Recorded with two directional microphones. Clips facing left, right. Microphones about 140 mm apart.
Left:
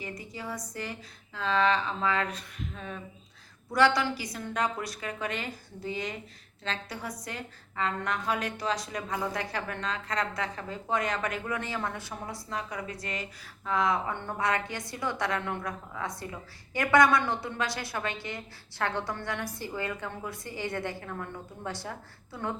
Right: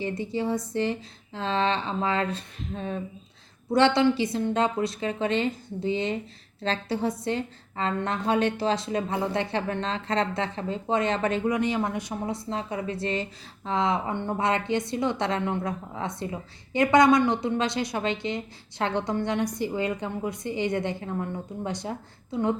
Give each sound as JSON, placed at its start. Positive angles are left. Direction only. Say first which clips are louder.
{"t": 0.0, "sound": "a woman's voice", "louder": "right 11 dB", "side_deg": -30}